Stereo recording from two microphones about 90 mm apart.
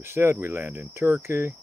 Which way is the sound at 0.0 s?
30° right (ahead or behind).